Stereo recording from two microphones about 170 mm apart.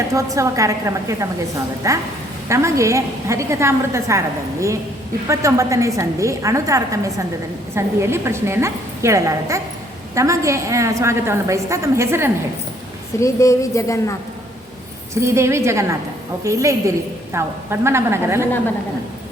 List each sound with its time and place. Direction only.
0.1 s a woman's voice: 20° right (ahead or behind)
5.3 s a woman's voice: 20° right (ahead or behind)
13.1 s a woman's voice: 20° left (ahead or behind)
15.1 s a woman's voice: 15° right (ahead or behind)